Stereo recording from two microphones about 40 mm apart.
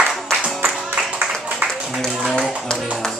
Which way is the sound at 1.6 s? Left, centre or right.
Right.